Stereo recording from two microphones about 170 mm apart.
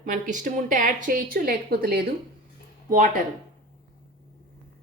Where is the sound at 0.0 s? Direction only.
45° right (ahead or behind).